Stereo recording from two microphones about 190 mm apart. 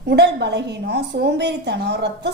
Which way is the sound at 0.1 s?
60° right (ahead or behind).